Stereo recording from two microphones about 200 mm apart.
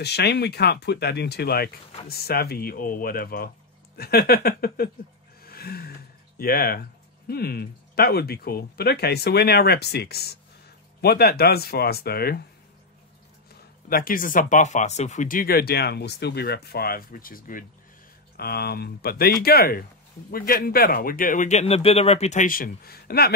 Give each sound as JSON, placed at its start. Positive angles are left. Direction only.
{"t": 0.0, "sound": "speech", "side_deg": 55}
{"t": 13.8, "sound": "speech", "side_deg": 45}